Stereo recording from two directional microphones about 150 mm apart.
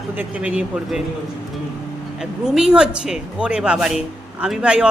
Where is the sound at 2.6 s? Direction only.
5° right (ahead or behind).